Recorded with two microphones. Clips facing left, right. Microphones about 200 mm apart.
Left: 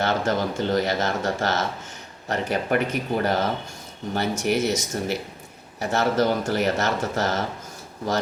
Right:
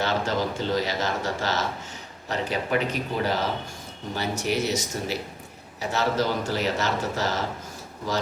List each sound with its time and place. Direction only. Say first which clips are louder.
0.0 s speech: left 2 dB; 50° left (ahead or behind)